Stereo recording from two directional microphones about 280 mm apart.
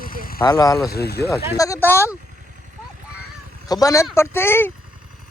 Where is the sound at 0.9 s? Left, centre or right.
Left.